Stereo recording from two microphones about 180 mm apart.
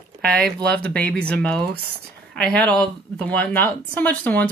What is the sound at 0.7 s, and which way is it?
Speech, 5° left (ahead or behind).